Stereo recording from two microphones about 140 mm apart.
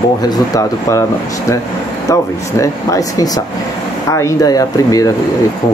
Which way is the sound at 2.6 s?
25° left (ahead or behind).